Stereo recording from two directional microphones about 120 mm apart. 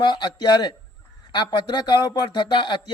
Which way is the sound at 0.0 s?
40° left (ahead or behind).